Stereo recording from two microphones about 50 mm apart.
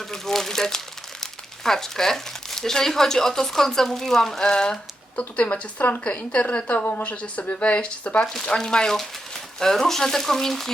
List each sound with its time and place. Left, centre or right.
0.0 s crumpling: centre
1.2 s speech: centre
5.8 s a woman's voice: left
8.3 s speech: centre